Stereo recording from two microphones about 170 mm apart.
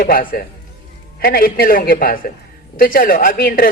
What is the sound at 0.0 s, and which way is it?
Speech, 60° left (ahead or behind).